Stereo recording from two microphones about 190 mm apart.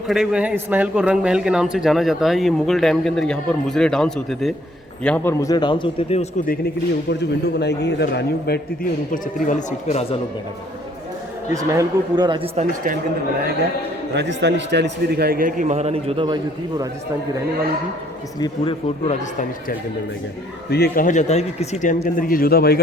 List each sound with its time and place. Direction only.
0.1 s a man's voice: 5° right (ahead or behind); by 6.2 s 30° left (ahead or behind)
7.1 s a man's voice: 65° left (ahead or behind)
9.1 s speech: 40° left (ahead or behind)
11.5 s speech: 15° right (ahead or behind)
12.5 s a man's voice: 45° right (ahead or behind)
14.1 s a man's voice: 65° right (ahead or behind); by 16.9 s 20° right (ahead or behind)
18.3 s a man's voice: 25° left (ahead or behind)
19.2 s speech: 40° left (ahead or behind)
20.7 s speech: 55° left (ahead or behind)